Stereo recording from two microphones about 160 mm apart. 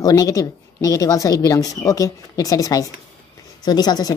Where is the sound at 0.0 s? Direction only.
25° left (ahead or behind).